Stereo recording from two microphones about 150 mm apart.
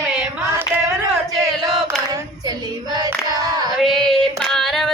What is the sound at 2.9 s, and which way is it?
Female singing, 25° right (ahead or behind).